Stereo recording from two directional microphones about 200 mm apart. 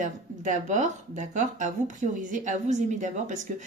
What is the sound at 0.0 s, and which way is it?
Speech, 40° right (ahead or behind).